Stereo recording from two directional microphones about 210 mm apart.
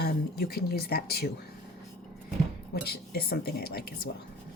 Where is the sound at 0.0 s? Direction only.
45° left (ahead or behind).